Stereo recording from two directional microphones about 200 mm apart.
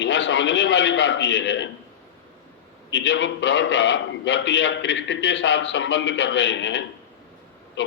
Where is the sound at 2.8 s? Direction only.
65° left (ahead or behind).